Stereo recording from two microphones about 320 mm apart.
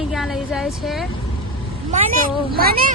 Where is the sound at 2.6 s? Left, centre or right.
Right.